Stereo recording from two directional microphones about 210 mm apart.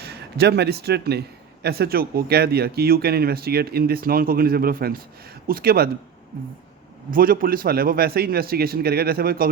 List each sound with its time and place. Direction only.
0.0 s speech: 50° right (ahead or behind)
7.1 s speech: 45° right (ahead or behind)